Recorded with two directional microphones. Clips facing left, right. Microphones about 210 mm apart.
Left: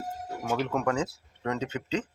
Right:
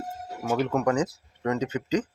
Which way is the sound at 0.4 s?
5° right (ahead or behind).